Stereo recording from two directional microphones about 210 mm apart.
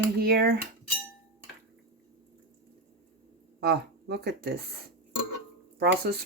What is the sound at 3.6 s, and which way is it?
Speech, 50° right (ahead or behind).